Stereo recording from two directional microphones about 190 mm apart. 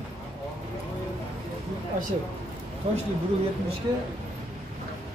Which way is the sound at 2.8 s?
35° right (ahead or behind).